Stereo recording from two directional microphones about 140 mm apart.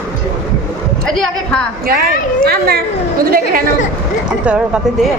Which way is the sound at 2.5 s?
90° right.